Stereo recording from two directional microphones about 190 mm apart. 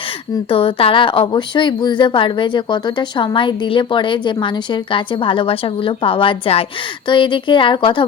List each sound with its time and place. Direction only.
0.5 s speech: 30° left (ahead or behind)